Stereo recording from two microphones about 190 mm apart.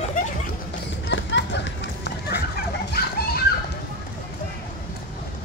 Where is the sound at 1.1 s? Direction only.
70° left (ahead or behind); by 3.4 s 55° left (ahead or behind).